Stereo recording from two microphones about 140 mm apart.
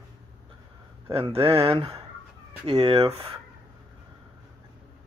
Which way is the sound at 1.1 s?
40° right (ahead or behind).